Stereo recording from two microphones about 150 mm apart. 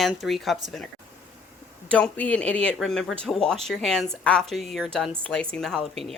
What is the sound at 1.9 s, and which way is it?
Speech, 10° left (ahead or behind).